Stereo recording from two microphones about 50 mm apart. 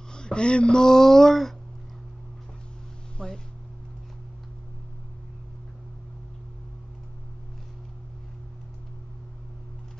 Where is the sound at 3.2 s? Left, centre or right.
Centre.